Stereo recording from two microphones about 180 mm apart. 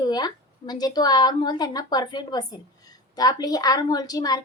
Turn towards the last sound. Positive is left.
turn(degrees=20)  # may be behind; listen again after turning